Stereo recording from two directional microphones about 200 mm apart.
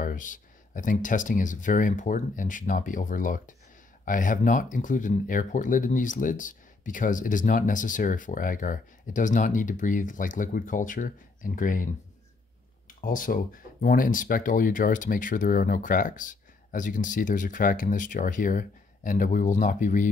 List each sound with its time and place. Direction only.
0.0 s speech: 40° left (ahead or behind)